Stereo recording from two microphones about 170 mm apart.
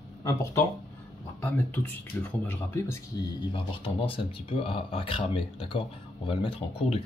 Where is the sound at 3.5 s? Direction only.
30° left (ahead or behind).